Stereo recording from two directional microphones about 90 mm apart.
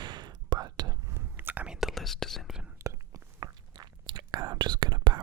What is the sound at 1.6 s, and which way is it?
Whispering, 5° right (ahead or behind).